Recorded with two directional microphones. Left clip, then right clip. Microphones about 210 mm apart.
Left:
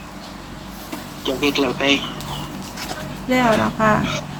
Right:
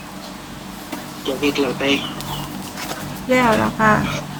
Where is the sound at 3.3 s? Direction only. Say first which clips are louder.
Right 1 dB; 5° left (ahead or behind).